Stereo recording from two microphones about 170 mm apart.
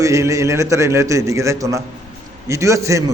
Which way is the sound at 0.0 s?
20° right (ahead or behind).